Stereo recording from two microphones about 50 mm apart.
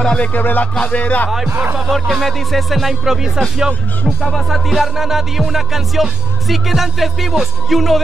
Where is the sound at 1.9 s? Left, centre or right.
Centre.